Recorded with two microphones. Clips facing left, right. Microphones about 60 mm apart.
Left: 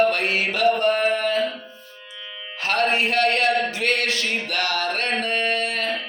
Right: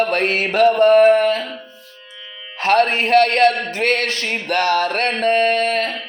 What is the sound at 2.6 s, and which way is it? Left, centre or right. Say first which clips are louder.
Speech: right 5 dB; right.